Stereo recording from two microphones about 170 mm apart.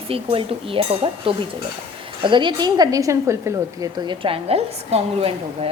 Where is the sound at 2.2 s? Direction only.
30° right (ahead or behind).